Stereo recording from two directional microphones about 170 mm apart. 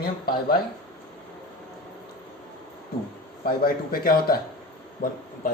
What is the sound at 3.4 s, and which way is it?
Speech, 60° left (ahead or behind).